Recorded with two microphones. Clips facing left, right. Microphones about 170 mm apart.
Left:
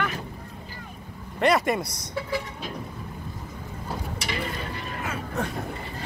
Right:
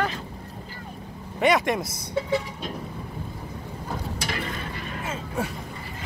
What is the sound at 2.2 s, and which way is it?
Vehicle, 25° right (ahead or behind).